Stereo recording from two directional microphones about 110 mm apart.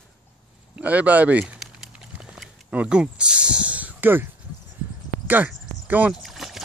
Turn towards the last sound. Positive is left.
turn(degrees=-5)  # may be behind; listen again after turning